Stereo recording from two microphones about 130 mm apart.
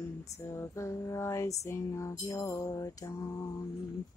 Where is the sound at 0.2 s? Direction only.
25° left (ahead or behind).